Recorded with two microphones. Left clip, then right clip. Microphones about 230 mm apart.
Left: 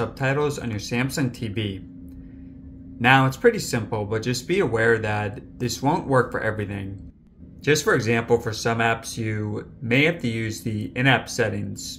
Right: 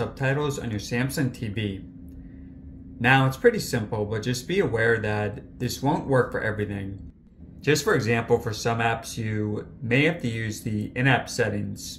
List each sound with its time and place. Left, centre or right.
0.0 s speech: centre
3.0 s speech: centre